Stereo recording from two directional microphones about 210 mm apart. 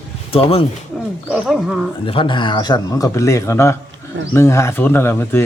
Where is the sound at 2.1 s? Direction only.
25° left (ahead or behind).